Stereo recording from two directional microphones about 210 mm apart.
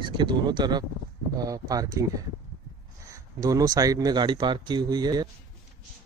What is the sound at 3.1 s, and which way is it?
Speech, 15° right (ahead or behind).